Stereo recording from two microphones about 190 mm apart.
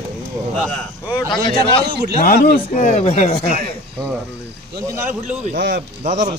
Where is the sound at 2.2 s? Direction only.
45° left (ahead or behind).